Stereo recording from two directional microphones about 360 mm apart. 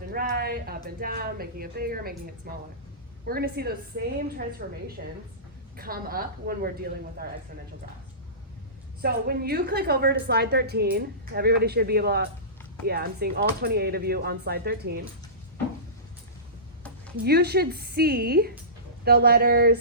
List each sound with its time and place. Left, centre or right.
0.1 s a woman's voice: right
9.0 s a woman's voice: right
17.2 s a woman's voice: right